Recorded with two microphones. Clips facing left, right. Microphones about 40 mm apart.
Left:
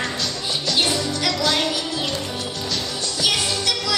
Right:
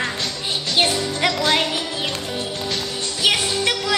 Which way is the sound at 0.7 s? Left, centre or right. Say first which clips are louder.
Right 2 dB; right.